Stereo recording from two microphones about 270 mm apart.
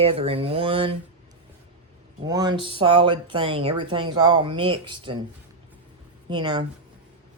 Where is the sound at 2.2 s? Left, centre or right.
Centre.